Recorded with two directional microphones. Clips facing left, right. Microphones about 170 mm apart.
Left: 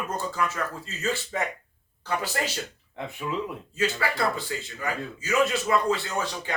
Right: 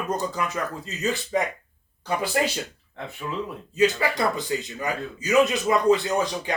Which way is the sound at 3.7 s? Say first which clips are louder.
Right 6 dB; 20° right (ahead or behind).